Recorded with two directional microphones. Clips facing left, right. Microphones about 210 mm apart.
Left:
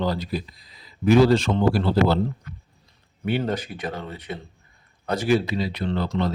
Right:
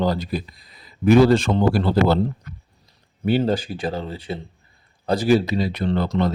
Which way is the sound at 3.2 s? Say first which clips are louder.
Right 5 dB; 30° right (ahead or behind).